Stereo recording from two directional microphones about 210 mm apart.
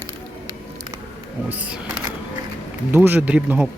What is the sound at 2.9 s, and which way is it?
Speech, 10° right (ahead or behind).